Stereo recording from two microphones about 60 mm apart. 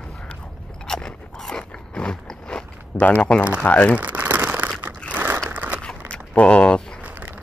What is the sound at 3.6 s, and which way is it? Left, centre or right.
Speech, left.